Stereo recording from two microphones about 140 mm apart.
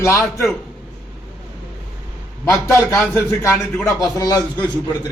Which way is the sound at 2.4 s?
20° left (ahead or behind).